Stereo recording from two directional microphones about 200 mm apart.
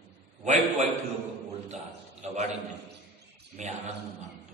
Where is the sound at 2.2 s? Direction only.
35° right (ahead or behind).